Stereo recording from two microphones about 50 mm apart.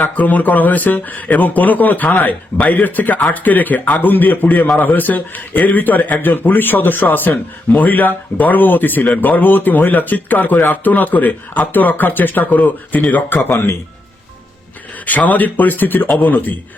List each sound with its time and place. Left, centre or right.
0.0 s speech: left
13.5 s speech: left
15.0 s speech: left